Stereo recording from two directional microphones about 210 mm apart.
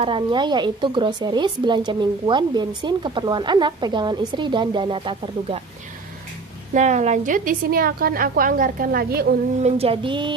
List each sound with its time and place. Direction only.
0.0 s speech: 25° right (ahead or behind)
6.7 s a woman's voice: 35° right (ahead or behind)
9.6 s speech: 30° right (ahead or behind)